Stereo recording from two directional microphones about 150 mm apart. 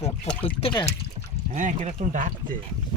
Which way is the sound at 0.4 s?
35° left (ahead or behind).